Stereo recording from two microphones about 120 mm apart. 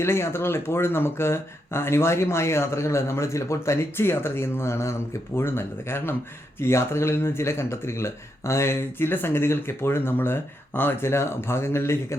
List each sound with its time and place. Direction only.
0.0 s speech: 20° left (ahead or behind)